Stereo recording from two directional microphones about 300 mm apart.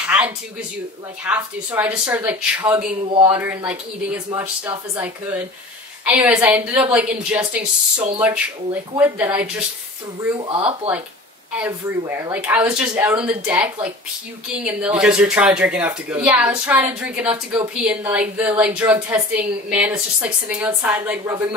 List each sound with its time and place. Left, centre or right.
0.0 s a sound: centre
1.2 s speech: centre
10.5 s speech: centre
11.6 s speech: centre
14.6 s speech: centre